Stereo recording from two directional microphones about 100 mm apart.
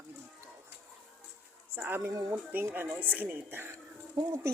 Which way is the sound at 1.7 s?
20° right (ahead or behind).